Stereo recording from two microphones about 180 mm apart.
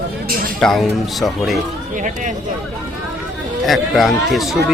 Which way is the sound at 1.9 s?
45° right (ahead or behind).